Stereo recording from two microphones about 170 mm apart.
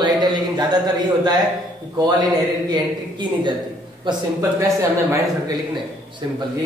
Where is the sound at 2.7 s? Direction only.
25° right (ahead or behind).